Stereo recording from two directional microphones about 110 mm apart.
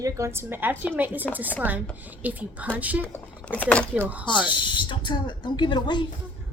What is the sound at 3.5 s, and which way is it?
Speech, 10° left (ahead or behind).